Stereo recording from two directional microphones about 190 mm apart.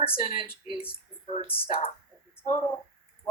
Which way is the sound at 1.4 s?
30° left (ahead or behind).